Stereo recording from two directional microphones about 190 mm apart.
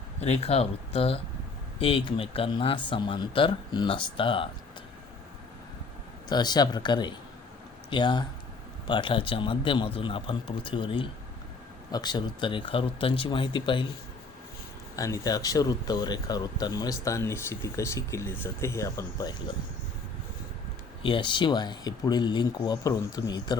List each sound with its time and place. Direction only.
0.2 s speech: 35° left (ahead or behind)
6.2 s speech: 20° left (ahead or behind)
14.9 s speech: 15° left (ahead or behind)
21.0 s speech: 25° left (ahead or behind)